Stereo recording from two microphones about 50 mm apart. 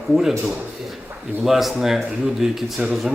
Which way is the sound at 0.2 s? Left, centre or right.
Centre.